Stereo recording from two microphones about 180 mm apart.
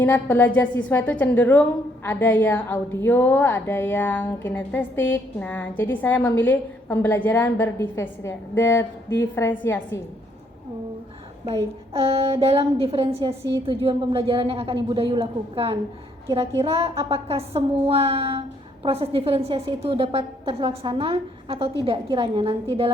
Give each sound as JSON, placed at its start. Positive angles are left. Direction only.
{"t": 0.0, "sound": "a woman's voice", "side_deg": 10}
{"t": 12.1, "sound": "a woman's voice", "side_deg": -35}